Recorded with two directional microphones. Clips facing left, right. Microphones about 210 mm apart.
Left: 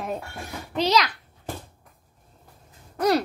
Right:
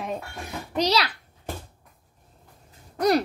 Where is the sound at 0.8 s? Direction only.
35° right (ahead or behind).